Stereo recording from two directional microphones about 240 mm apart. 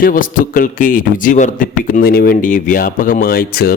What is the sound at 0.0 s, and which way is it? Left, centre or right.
A man's voice, left.